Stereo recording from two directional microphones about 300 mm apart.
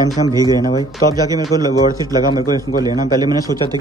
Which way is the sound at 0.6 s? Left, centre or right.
Centre.